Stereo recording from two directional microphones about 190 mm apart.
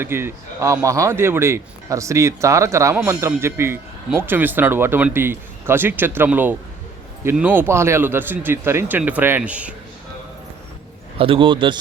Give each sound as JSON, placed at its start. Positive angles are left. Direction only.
{"t": 0.0, "sound": "speech", "side_deg": -10}
{"t": 11.2, "sound": "a man's voice", "side_deg": -30}